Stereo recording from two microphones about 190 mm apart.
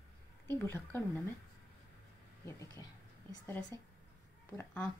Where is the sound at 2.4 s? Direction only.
15° left (ahead or behind).